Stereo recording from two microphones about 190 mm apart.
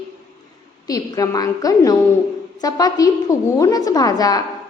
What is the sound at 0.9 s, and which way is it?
A woman's voice, 20° left (ahead or behind).